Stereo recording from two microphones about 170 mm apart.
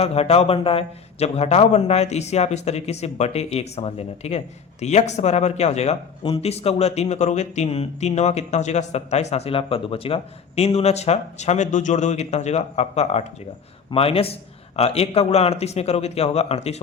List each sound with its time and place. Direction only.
0.0 s a man's voice: 35° left (ahead or behind)